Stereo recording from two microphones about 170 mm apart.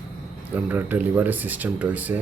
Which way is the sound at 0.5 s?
10° right (ahead or behind).